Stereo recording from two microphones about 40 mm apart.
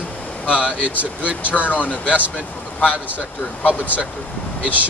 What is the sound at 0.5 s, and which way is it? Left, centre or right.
Speech, right.